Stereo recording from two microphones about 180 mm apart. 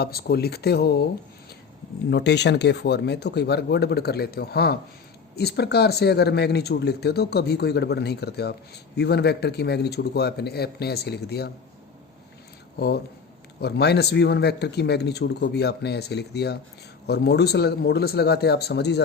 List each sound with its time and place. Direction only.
0.0 s speech: 60° left (ahead or behind)
2.0 s speech: 70° left (ahead or behind)
13.6 s speech: 65° left (ahead or behind)